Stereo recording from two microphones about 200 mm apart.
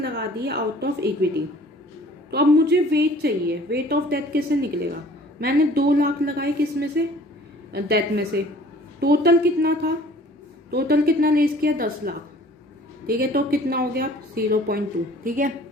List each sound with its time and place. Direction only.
0.0 s a woman's voice: 55° right (ahead or behind)
2.3 s a woman's voice: 55° right (ahead or behind)